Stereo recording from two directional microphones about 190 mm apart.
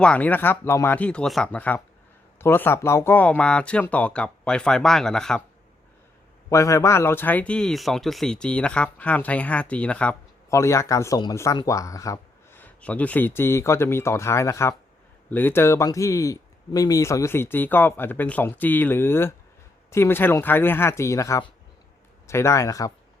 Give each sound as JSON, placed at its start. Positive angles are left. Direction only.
{"t": 0.0, "sound": "speech", "side_deg": 5}
{"t": 6.5, "sound": "speech", "side_deg": 15}